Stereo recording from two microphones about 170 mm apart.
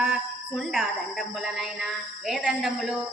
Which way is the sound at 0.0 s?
5° right (ahead or behind).